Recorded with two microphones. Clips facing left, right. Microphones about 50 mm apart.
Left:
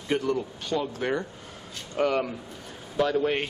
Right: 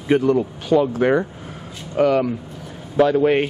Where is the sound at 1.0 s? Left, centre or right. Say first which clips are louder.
Right 11 dB; centre.